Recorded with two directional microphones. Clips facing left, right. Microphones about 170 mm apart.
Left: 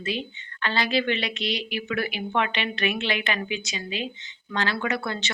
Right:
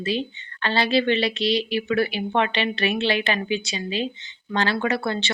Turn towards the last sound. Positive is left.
turn(degrees=-30)  # may be behind; listen again after turning